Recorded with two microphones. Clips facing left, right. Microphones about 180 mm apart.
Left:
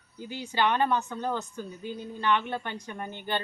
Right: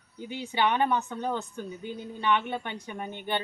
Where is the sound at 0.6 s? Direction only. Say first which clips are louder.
Even; 15° right (ahead or behind).